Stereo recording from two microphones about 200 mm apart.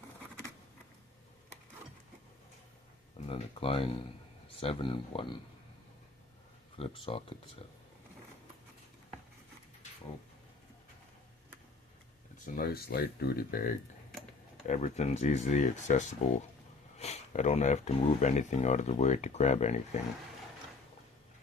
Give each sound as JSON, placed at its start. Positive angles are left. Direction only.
{"t": 3.2, "sound": "speech", "side_deg": 30}
{"t": 6.7, "sound": "speech", "side_deg": 25}
{"t": 12.5, "sound": "speech", "side_deg": 50}
{"t": 14.7, "sound": "speech", "side_deg": 35}